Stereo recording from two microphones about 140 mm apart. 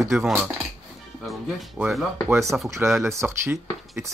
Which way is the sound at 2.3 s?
20° right (ahead or behind).